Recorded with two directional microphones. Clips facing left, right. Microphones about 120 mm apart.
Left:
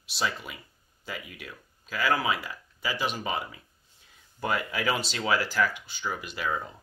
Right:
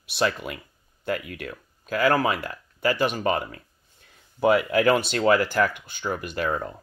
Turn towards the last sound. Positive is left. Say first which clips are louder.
# right 5 dB
turn(degrees=-55)  # may be behind; listen again after turning